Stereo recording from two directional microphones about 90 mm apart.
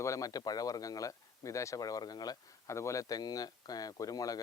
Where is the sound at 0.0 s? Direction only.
40° left (ahead or behind).